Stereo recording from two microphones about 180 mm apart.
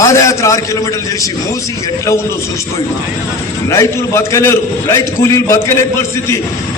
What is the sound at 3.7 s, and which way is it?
Speech, 15° left (ahead or behind).